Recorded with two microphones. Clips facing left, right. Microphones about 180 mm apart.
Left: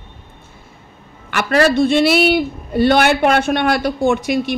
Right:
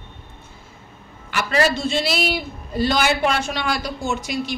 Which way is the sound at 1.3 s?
60° left (ahead or behind).